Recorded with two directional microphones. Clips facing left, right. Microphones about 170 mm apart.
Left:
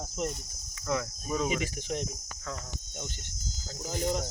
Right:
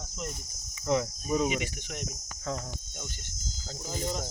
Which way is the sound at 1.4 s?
35° left (ahead or behind).